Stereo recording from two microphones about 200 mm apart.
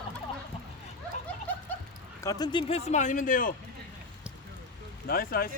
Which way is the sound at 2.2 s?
20° left (ahead or behind).